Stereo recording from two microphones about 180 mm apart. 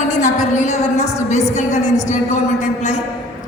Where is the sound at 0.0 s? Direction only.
40° left (ahead or behind).